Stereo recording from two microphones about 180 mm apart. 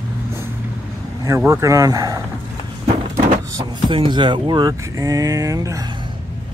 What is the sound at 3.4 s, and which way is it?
Speech, 25° right (ahead or behind).